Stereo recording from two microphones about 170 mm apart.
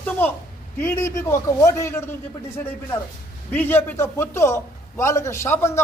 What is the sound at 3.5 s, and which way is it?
A man's voice, 10° left (ahead or behind).